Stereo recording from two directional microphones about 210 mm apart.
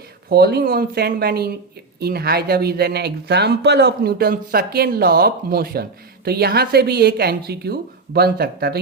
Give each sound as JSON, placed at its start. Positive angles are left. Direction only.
{"t": 0.3, "sound": "speech", "side_deg": -50}